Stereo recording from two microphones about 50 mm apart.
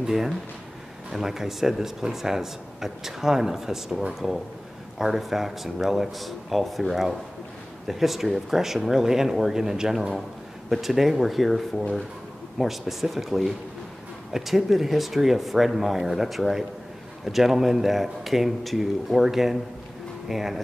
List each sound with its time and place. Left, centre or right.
0.0 s a man's voice: centre